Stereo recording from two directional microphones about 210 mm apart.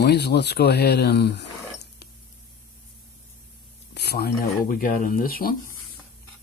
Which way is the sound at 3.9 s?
50° left (ahead or behind).